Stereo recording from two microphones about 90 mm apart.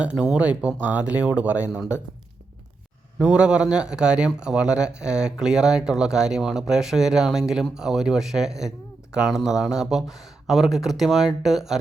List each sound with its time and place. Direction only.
0.3 s a man's voice: 15° right (ahead or behind)
3.2 s a man's voice: 10° right (ahead or behind)